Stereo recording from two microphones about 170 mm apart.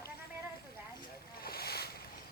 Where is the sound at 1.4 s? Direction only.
65° left (ahead or behind).